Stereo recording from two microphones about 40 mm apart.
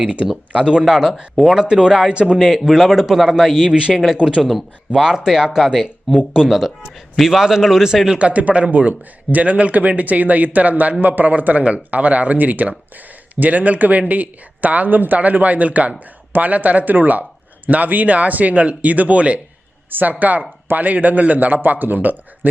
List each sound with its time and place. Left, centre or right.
0.6 s speech: right
0.9 s a man's voice: centre
2.4 s a man's voice: centre
3.7 s speech: right
5.1 s a man's voice: centre
8.2 s speech: right
19.9 s a man's voice: right